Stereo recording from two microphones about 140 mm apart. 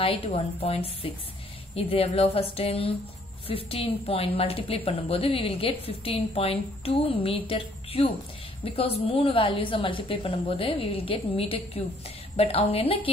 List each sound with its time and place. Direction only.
0.0 s a woman's voice: 40° left (ahead or behind)